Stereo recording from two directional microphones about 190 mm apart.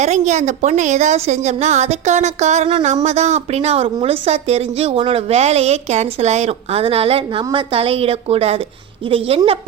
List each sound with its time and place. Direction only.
0.0 s a woman's voice: 35° right (ahead or behind)